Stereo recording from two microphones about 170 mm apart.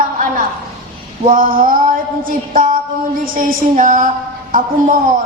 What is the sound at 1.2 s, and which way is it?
Male singing, 55° right (ahead or behind).